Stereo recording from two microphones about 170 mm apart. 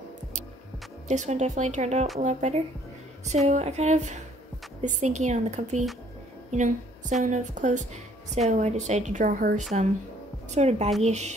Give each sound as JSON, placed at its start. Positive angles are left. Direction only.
{"t": 1.0, "sound": "a woman's voice", "side_deg": -45}